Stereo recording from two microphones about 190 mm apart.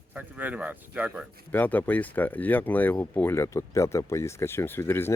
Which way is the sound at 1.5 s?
10° left (ahead or behind).